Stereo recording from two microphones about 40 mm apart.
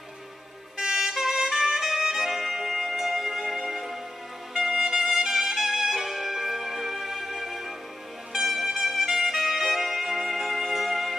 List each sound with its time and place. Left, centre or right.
0.7 s vehicle: centre
1.0 s music: centre